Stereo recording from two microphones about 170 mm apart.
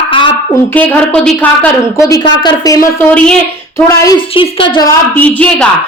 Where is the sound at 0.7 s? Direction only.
10° left (ahead or behind).